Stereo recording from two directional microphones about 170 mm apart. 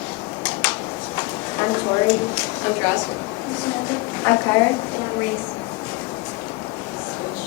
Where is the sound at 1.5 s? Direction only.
20° left (ahead or behind).